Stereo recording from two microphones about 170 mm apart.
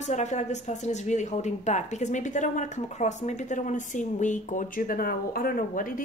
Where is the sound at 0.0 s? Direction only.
45° left (ahead or behind).